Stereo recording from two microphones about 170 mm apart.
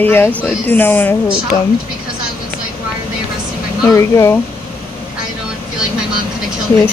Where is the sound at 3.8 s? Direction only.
15° left (ahead or behind).